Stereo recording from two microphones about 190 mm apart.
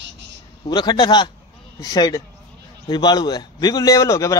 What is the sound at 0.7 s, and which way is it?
A man's voice, 20° left (ahead or behind).